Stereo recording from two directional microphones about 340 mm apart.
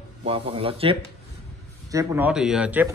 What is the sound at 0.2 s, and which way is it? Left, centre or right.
Speech, centre.